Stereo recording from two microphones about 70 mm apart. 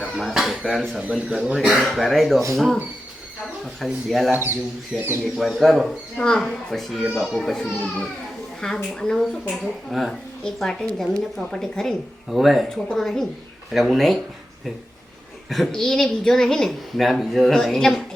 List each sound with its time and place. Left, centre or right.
0.2 s dishes: centre
0.7 s a woman's voice: centre
3.8 s a woman's voice: centre
4.3 s speech: right
5.4 s a woman's voice: centre
6.1 s a woman's voice: centre
7.6 s speech: centre
9.9 s a woman's voice: centre
10.4 s a woman's voice: centre
15.4 s a woman's voice: centre